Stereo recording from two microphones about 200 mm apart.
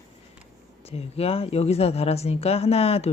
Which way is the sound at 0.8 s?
30° left (ahead or behind).